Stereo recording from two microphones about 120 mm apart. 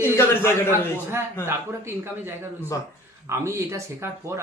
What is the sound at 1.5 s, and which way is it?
A man's voice, 20° right (ahead or behind).